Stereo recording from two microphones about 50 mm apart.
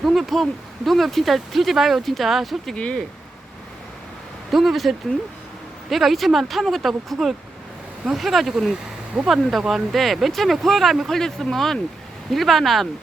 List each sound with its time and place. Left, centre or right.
0.0 s speech: centre
2.7 s speech: centre
4.5 s speech: centre